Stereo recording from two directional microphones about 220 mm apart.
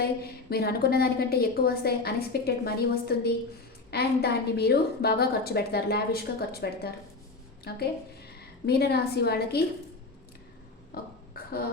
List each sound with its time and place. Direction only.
0.0 s a woman's voice: 45° left (ahead or behind)
10.9 s a woman's voice: 45° left (ahead or behind)
11.3 s a sound: 45° left (ahead or behind)